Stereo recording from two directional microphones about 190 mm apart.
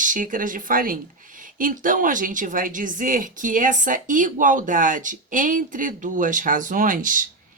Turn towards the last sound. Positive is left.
turn(degrees=-45)  # may be behind; listen again after turning